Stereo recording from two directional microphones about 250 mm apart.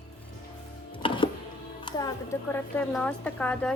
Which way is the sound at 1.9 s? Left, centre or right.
Centre.